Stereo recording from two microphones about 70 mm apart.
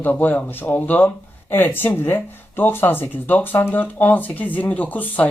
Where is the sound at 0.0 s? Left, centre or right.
Left.